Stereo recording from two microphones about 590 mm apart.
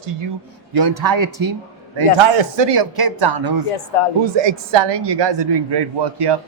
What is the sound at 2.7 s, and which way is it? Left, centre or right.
A man's voice, right.